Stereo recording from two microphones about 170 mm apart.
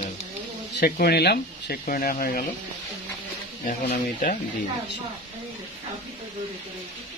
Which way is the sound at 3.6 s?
55° left (ahead or behind).